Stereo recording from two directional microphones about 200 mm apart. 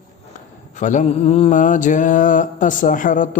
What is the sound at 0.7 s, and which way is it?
A man's voice, 40° left (ahead or behind).